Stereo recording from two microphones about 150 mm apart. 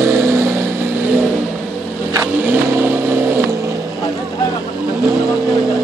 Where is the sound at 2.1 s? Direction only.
15° right (ahead or behind).